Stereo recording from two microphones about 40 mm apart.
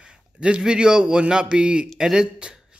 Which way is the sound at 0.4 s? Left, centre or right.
Right.